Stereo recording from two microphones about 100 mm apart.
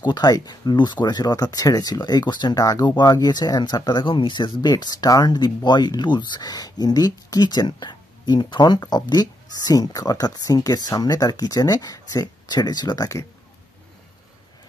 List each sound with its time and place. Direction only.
0.0 s speech: 45° left (ahead or behind)